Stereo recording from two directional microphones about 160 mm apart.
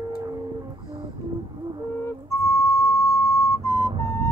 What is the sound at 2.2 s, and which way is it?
Music, 20° left (ahead or behind).